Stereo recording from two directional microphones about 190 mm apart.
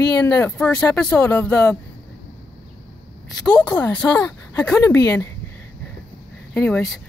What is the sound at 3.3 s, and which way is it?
Speech, 5° left (ahead or behind).